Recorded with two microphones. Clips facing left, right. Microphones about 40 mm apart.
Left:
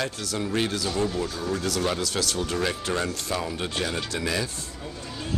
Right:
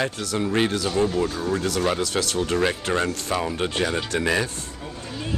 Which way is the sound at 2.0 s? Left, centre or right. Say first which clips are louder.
Right 3 dB; right.